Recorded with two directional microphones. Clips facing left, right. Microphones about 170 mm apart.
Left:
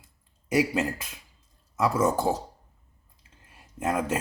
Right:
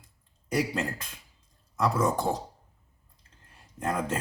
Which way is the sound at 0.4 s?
5° left (ahead or behind).